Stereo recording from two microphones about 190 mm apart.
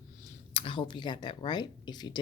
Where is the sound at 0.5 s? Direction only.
30° left (ahead or behind).